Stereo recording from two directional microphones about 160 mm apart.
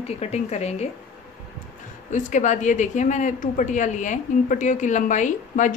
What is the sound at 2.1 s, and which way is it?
A woman's voice, 50° left (ahead or behind).